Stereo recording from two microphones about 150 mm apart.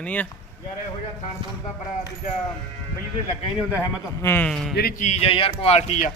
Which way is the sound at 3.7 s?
15° left (ahead or behind).